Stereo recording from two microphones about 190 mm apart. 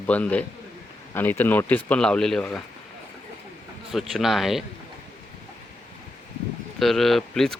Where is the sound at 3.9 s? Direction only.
Centre (ahead or behind).